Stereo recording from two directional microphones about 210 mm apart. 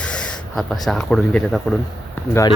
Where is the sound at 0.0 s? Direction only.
5° left (ahead or behind).